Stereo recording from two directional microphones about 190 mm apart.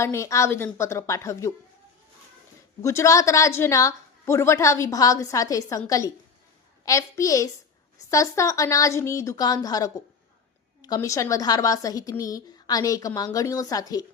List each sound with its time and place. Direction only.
0.0 s a woman's voice: 15° left (ahead or behind)
2.8 s a woman's voice: 15° left (ahead or behind)
6.8 s a woman's voice: 15° left (ahead or behind)